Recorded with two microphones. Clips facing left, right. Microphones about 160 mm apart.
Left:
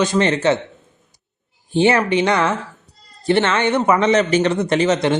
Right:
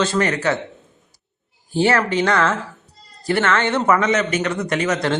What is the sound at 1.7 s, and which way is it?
Speech, 20° left (ahead or behind).